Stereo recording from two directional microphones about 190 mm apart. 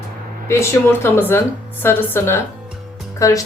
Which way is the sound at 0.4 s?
15° left (ahead or behind).